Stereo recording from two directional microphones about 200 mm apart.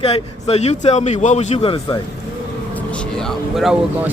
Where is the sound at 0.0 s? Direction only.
30° left (ahead or behind).